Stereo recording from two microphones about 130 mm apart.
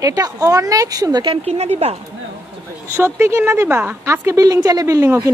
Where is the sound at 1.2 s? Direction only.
50° right (ahead or behind).